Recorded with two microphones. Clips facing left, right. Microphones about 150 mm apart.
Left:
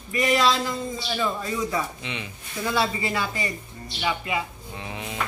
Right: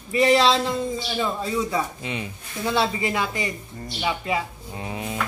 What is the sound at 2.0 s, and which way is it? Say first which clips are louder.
Speech: right 4 dB; 40° right (ahead or behind).